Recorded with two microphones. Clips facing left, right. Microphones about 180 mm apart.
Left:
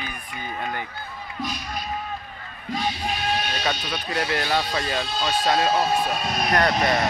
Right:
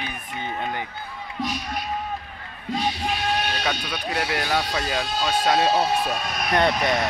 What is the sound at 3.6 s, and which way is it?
Speech, 10° right (ahead or behind).